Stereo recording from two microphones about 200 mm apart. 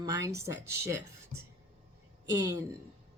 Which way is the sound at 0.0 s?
20° right (ahead or behind).